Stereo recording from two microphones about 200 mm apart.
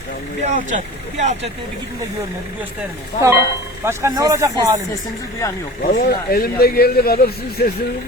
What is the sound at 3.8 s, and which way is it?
Speech, 15° right (ahead or behind).